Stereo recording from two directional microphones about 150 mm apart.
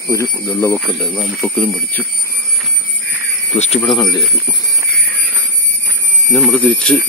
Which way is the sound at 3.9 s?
30° left (ahead or behind).